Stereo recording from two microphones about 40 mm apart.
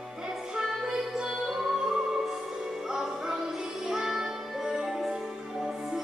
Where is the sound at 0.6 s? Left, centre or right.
Centre.